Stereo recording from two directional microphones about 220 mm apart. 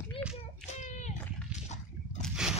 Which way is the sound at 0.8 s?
30° left (ahead or behind).